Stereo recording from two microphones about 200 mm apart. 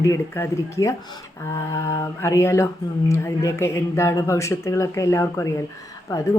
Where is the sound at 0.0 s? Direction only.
15° left (ahead or behind).